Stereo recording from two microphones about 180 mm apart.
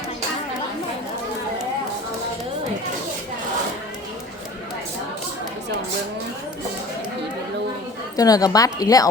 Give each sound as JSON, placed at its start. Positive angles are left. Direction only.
{"t": 8.1, "sound": "a woman's voice", "side_deg": 20}